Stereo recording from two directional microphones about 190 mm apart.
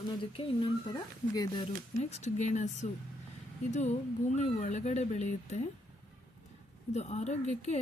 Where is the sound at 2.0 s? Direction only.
35° left (ahead or behind).